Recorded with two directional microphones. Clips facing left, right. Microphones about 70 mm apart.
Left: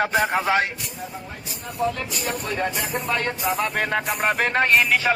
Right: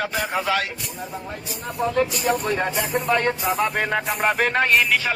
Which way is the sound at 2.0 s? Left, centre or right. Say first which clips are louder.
Right 8 dB; right.